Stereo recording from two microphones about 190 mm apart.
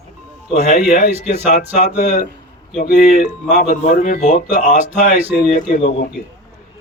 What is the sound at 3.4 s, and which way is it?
Mantra, 40° left (ahead or behind).